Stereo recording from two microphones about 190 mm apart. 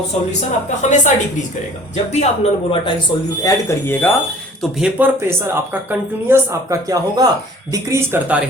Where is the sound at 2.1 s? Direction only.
35° left (ahead or behind).